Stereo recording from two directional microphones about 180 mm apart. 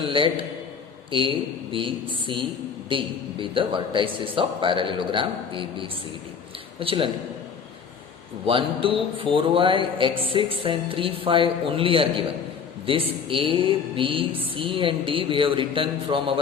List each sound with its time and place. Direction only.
0.0 s speech: 30° right (ahead or behind)
8.4 s speech: 30° right (ahead or behind)